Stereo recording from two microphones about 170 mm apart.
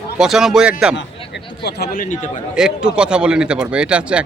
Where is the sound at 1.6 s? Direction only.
65° left (ahead or behind); by 2.4 s 45° left (ahead or behind).